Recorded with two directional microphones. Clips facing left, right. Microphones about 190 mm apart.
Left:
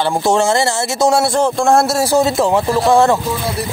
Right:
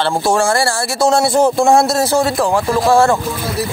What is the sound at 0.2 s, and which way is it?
Speech, 20° left (ahead or behind).